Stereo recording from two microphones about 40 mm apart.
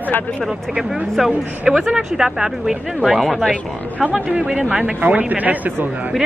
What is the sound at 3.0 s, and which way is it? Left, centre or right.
Speech, centre.